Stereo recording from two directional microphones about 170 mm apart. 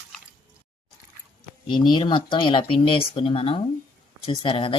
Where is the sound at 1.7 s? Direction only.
25° left (ahead or behind).